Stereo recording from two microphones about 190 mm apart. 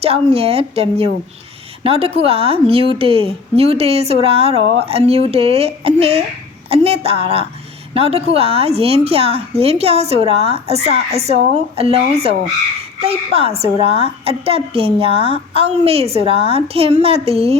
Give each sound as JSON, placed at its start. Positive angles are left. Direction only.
{"t": 0.0, "sound": "a woman's voice", "side_deg": -30}